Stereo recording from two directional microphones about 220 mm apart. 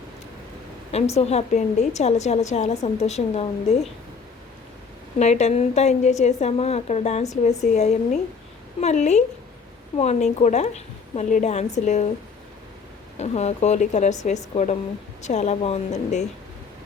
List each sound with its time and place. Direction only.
0.9 s a woman's voice: 30° left (ahead or behind)
5.2 s a woman's voice: 30° left (ahead or behind)
13.1 s a woman's voice: 30° left (ahead or behind)